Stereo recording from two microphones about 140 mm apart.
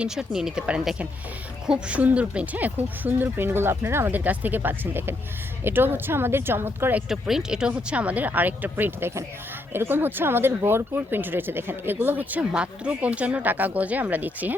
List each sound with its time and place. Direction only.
0.0 s speech: 5° right (ahead or behind)
7.1 s speech: 5° right (ahead or behind)